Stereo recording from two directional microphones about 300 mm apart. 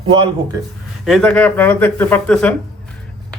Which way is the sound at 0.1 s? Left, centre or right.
Centre.